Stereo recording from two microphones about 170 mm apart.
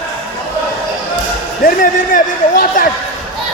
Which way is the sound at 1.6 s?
55° left (ahead or behind).